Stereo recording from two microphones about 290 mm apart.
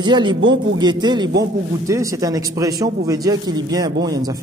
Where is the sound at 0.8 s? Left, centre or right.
Centre.